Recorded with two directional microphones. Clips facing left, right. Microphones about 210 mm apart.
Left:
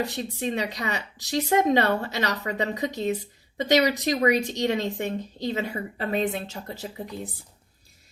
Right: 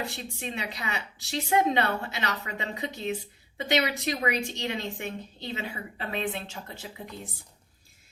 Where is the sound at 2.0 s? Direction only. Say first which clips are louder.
Left 5 dB; 40° left (ahead or behind).